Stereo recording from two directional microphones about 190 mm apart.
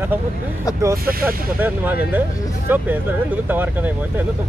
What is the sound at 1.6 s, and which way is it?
Speech, 10° right (ahead or behind).